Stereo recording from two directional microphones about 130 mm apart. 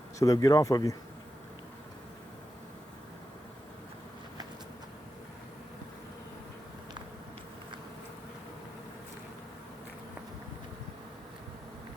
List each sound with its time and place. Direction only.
0.2 s speech: 25° left (ahead or behind)